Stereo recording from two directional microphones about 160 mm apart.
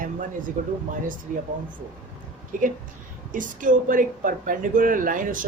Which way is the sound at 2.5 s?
55° right (ahead or behind).